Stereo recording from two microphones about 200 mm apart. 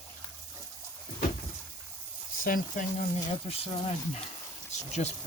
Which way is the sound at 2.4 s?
40° left (ahead or behind).